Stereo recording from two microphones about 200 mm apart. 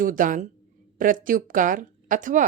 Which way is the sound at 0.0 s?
40° right (ahead or behind).